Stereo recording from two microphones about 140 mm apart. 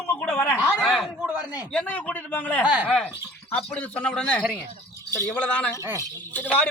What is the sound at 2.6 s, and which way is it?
Speech, 10° right (ahead or behind).